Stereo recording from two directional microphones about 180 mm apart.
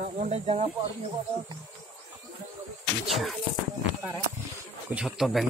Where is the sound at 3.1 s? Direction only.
Centre (ahead or behind).